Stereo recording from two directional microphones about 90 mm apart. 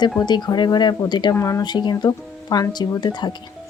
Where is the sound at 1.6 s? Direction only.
55° left (ahead or behind).